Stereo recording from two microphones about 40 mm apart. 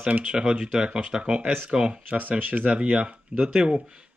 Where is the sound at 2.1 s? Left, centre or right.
Right.